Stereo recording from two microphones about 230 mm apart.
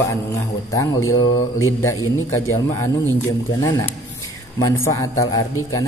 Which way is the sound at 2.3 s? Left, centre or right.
Centre.